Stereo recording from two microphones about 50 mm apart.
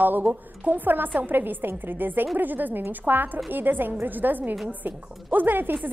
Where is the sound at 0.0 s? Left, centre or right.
Right.